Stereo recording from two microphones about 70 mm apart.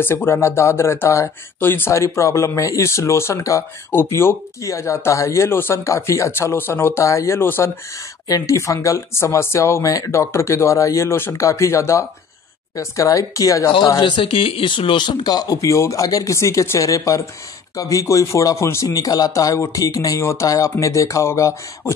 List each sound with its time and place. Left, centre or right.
0.0 s speech: left
7.4 s speech: left
8.3 s speech: left
15.0 s speech: left
16.3 s speech: left
19.0 s speech: left
20.2 s speech: left
20.4 s speech: left